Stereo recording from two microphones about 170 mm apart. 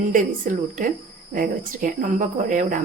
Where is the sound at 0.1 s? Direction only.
50° right (ahead or behind).